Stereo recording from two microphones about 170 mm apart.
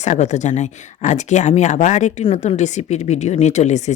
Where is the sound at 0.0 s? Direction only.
45° left (ahead or behind).